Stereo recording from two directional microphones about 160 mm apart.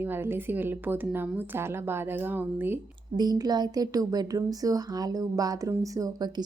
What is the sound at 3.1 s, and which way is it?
A woman's voice, 25° right (ahead or behind).